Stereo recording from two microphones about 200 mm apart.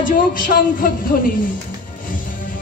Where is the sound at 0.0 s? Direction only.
40° left (ahead or behind).